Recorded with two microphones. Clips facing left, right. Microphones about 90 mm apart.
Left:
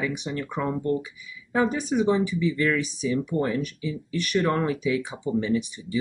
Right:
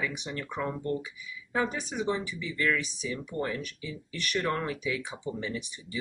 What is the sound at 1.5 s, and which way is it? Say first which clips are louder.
Speech: left 7 dB; 5° left (ahead or behind).